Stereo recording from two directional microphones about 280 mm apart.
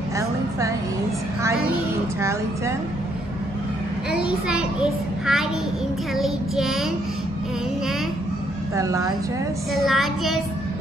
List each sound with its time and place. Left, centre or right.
4.1 s a child's voice: centre
6.1 s child singing: centre
8.7 s speech: centre
9.8 s child singing: centre